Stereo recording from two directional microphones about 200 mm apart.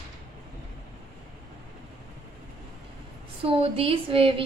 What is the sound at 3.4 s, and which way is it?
A woman's voice, 25° right (ahead or behind).